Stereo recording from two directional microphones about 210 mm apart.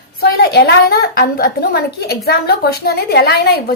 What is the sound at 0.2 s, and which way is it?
A woman's voice, 50° left (ahead or behind).